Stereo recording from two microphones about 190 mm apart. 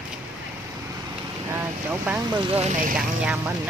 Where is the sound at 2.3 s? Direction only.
30° right (ahead or behind).